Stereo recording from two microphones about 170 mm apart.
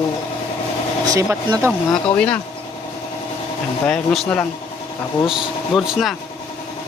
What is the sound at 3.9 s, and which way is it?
Speech, centre (ahead or behind).